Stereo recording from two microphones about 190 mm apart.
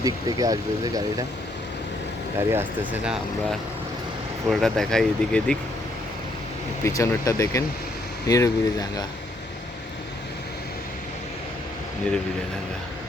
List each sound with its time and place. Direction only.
0.0 s speech: 20° right (ahead or behind)
2.5 s speech: 10° right (ahead or behind)
6.8 s speech: 15° left (ahead or behind)